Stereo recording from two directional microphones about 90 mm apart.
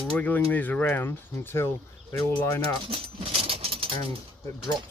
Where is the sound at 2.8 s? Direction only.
90° right.